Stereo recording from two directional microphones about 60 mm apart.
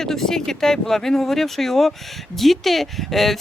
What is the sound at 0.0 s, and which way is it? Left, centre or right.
A woman's voice, centre.